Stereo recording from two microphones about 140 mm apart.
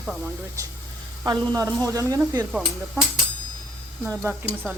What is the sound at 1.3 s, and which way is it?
Speech, 25° right (ahead or behind).